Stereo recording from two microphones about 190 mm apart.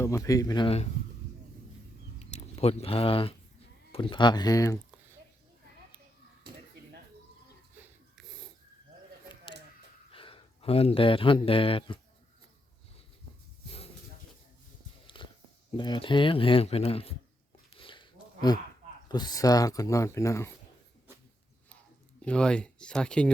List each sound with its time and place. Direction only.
0.0 s speech: 15° left (ahead or behind)
2.1 s a sound: 35° left (ahead or behind)
3.9 s speech: 25° left (ahead or behind)
7.8 s rub: centre (ahead or behind)
10.1 s speech: 30° left (ahead or behind)
15.0 s a sound: 25° left (ahead or behind)
15.8 s speech: 25° left (ahead or behind)
17.7 s a sound: 25° left (ahead or behind)
19.0 s speech: 20° left (ahead or behind)
22.2 s speech: 5° left (ahead or behind)